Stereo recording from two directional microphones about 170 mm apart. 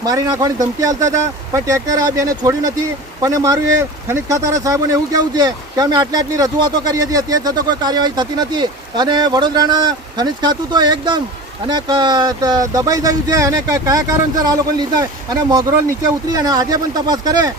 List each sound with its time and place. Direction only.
0.0 s speech: 20° right (ahead or behind)